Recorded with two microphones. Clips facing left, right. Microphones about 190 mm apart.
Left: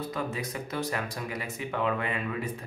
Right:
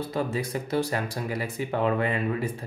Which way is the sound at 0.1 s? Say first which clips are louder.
Right 5 dB; 30° right (ahead or behind).